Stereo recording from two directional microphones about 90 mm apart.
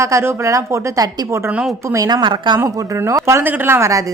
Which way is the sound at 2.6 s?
35° right (ahead or behind).